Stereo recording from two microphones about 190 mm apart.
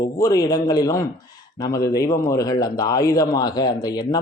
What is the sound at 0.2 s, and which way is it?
A man's voice, 20° left (ahead or behind).